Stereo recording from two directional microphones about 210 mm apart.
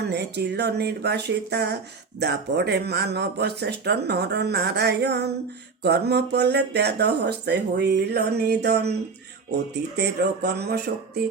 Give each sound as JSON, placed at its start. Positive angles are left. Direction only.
{"t": 0.0, "sound": "speech", "side_deg": -50}
{"t": 10.0, "sound": "speech", "side_deg": -50}